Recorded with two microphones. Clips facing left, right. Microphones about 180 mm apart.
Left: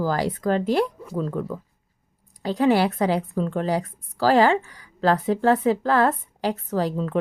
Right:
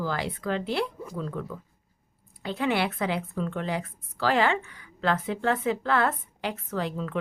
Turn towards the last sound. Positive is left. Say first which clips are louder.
# left 6 dB
turn(degrees=35)  # may be behind; listen again after turning